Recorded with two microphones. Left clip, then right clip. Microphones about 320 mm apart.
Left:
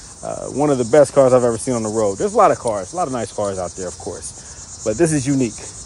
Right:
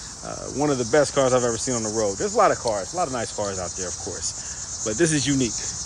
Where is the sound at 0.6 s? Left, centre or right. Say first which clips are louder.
Left 7 dB; centre.